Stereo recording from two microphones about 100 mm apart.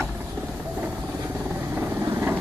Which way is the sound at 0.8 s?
15° right (ahead or behind).